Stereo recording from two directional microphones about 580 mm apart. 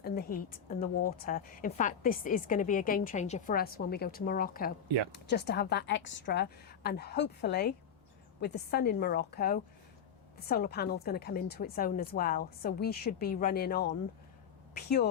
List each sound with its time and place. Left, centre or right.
0.0 s a woman's voice: centre